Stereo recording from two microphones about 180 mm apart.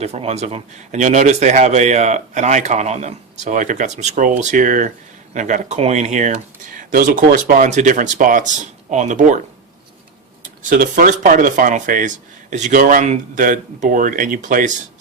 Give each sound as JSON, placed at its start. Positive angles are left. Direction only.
{"t": 0.0, "sound": "a man's voice", "side_deg": -35}
{"t": 10.4, "sound": "speech", "side_deg": -45}